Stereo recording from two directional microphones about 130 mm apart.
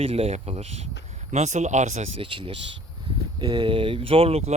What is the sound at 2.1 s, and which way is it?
Speech, 40° right (ahead or behind).